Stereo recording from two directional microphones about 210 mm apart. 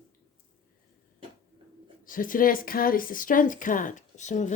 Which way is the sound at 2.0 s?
40° left (ahead or behind).